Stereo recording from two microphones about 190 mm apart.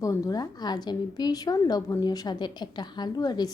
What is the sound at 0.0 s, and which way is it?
A woman's voice, 20° left (ahead or behind).